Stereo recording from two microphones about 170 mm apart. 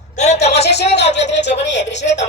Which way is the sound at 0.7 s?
80° left.